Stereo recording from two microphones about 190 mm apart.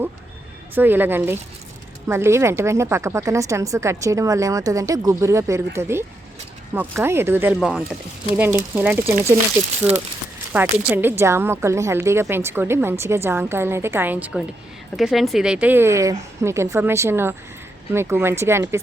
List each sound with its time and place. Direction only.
0.7 s speech: 10° right (ahead or behind)